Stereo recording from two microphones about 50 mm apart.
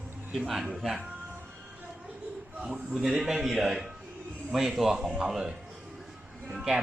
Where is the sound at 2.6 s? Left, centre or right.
Centre.